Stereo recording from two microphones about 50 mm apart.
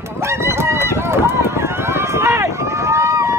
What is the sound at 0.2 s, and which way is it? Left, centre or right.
Run, right.